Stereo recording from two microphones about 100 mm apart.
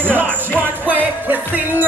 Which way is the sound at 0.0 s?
20° right (ahead or behind).